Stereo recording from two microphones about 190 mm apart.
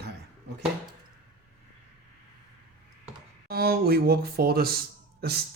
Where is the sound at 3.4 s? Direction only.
55° right (ahead or behind).